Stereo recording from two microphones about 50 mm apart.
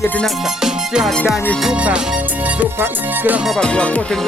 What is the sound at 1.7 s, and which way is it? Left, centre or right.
Music, right.